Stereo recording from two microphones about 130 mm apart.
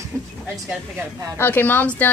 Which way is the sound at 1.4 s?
15° left (ahead or behind).